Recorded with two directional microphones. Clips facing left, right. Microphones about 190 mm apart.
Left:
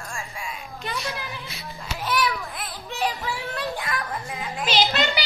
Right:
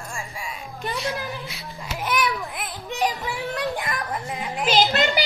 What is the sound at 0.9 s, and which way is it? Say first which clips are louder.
Music: right 4 dB; 15° right (ahead or behind).